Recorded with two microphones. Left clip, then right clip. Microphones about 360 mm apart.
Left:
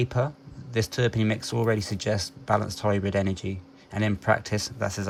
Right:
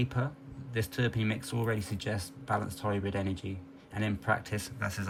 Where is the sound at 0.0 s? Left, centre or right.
Centre.